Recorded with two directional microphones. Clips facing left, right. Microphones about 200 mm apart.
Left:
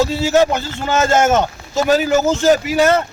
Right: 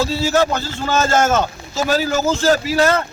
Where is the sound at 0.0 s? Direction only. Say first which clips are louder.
Left 3 dB; 20° left (ahead or behind).